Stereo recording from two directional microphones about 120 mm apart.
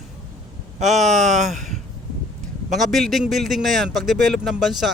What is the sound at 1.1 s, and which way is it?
Speech, 80° right.